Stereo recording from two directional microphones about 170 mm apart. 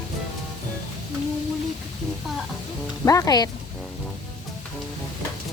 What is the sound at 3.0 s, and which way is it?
Speech, 20° left (ahead or behind).